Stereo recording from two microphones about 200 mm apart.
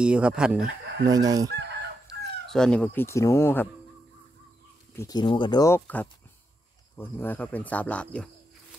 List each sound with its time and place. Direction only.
0.0 s speech: 5° right (ahead or behind)
1.0 s chicken: 20° right (ahead or behind)
1.5 s chicken: 60° right (ahead or behind)
2.5 s speech: 5° left (ahead or behind)
4.9 s speech: 20° left (ahead or behind)